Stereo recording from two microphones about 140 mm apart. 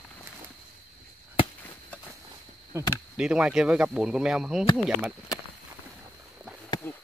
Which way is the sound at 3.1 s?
5° right (ahead or behind).